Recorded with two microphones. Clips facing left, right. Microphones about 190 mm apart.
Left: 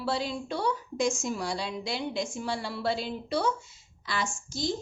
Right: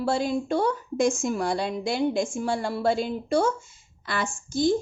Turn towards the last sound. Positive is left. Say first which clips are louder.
# right 8 dB
turn(degrees=-55)  # may be behind; listen again after turning